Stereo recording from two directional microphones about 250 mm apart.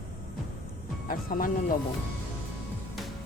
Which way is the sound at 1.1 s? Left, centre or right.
Left.